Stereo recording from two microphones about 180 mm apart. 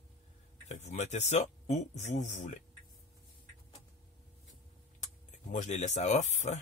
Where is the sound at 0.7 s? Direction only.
40° left (ahead or behind).